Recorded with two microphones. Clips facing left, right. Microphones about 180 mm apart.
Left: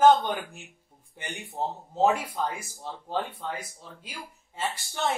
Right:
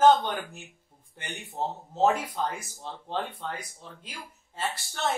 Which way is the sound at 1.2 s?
10° left (ahead or behind).